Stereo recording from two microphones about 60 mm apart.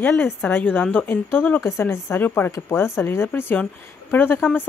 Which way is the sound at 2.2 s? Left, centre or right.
Left.